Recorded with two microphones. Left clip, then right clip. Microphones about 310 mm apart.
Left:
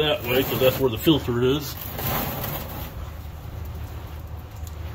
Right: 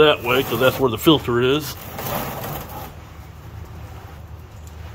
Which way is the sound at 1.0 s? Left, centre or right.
Centre.